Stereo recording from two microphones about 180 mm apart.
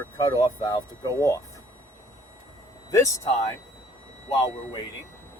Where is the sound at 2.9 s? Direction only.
15° left (ahead or behind).